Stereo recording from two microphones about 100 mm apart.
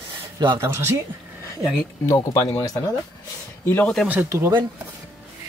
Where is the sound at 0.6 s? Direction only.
25° right (ahead or behind).